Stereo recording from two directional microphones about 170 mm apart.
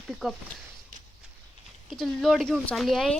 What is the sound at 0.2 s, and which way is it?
Speech, 5° right (ahead or behind).